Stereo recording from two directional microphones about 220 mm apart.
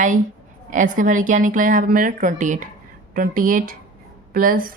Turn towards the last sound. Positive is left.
turn(degrees=-40)  # may be behind; listen again after turning